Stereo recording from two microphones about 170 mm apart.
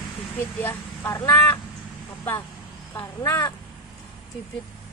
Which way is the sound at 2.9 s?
20° left (ahead or behind).